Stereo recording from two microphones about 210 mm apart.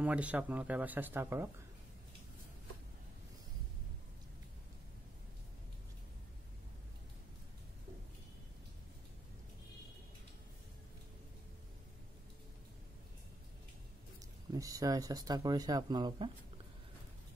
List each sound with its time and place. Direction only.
0.0 s speech: 5° right (ahead or behind)
14.5 s speech: 15° right (ahead or behind)